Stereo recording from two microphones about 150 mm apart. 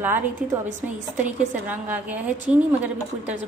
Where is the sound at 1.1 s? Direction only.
50° right (ahead or behind).